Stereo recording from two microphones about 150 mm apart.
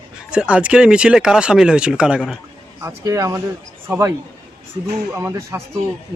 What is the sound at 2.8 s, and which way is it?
A man's voice, 20° right (ahead or behind).